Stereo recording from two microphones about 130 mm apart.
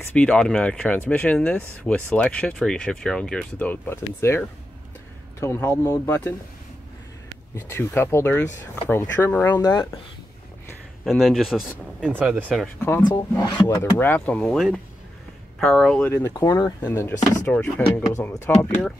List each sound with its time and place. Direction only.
0.0 s speech: 10° left (ahead or behind)
7.5 s speech: 20° left (ahead or behind)
9.6 s speech: 30° left (ahead or behind)
11.1 s speech: centre (ahead or behind)
12.2 s speech: 10° right (ahead or behind)
13.5 s speech: 30° left (ahead or behind)
13.9 s speech: 15° left (ahead or behind)
16.1 s speech: 20° left (ahead or behind)
16.8 s speech: 15° left (ahead or behind)